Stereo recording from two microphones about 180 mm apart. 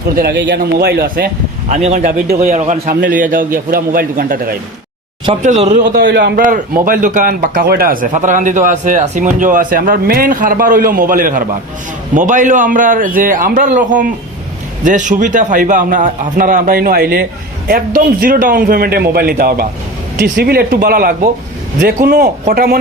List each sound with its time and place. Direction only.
0.2 s a man's voice: 70° right (ahead or behind)
1.7 s speech: 40° right (ahead or behind)
2.2 s a man's voice: 60° right (ahead or behind)
2.5 s speech: 45° right (ahead or behind)
5.4 s speech: 40° right (ahead or behind)
6.0 s a man's voice: 70° right (ahead or behind)
6.4 s speech: 50° right (ahead or behind)
14.8 s a man's voice: 45° right (ahead or behind)